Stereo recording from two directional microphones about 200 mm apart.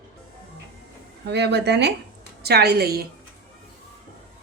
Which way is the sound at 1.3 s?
60° right (ahead or behind).